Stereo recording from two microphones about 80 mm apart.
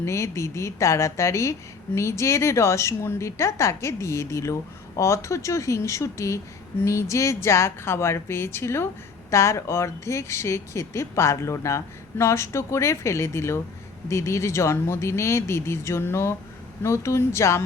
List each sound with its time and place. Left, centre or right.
0.0 s speech: left